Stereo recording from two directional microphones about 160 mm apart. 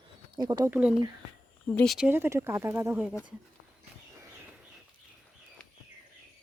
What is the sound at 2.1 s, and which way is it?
Speech, 15° right (ahead or behind).